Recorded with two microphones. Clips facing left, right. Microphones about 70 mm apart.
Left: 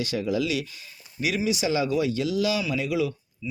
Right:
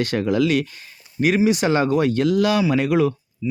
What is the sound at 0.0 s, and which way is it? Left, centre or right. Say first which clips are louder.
Speech: right 7 dB; right.